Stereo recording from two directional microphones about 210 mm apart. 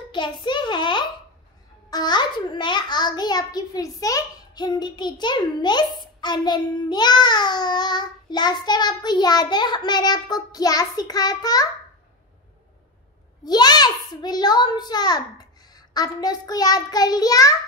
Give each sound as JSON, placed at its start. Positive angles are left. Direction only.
{"t": 0.1, "sound": "a child's voice", "side_deg": 20}
{"t": 13.4, "sound": "a child's voice", "side_deg": 20}